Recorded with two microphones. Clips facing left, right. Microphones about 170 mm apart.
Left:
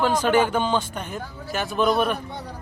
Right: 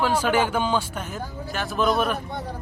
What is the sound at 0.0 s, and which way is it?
Speech, 10° right (ahead or behind).